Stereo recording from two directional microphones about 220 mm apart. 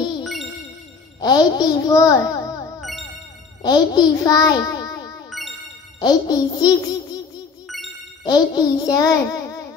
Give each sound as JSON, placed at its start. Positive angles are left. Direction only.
{"t": 0.2, "sound": "music", "side_deg": 0}
{"t": 1.2, "sound": "a child's voice", "side_deg": 20}
{"t": 2.8, "sound": "music", "side_deg": 0}
{"t": 3.6, "sound": "a child's voice", "side_deg": 20}
{"t": 5.9, "sound": "music", "side_deg": 20}
{"t": 7.6, "sound": "ding", "side_deg": 0}
{"t": 8.2, "sound": "a child's voice", "side_deg": 20}